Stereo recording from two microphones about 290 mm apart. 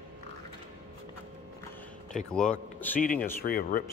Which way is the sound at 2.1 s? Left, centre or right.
Centre.